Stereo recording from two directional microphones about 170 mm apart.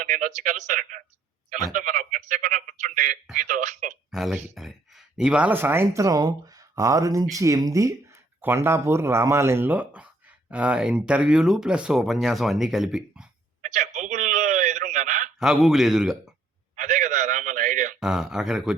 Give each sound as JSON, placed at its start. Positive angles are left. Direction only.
{"t": 0.0, "sound": "speech", "side_deg": -50}
{"t": 4.1, "sound": "a man's voice", "side_deg": 0}
{"t": 13.6, "sound": "a sound", "side_deg": -45}
{"t": 15.4, "sound": "a man's voice", "side_deg": 0}
{"t": 16.7, "sound": "a sound", "side_deg": -45}
{"t": 18.0, "sound": "a man's voice", "side_deg": -5}